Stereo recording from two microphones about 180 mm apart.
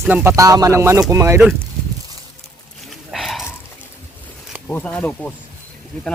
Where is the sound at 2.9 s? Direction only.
Centre (ahead or behind).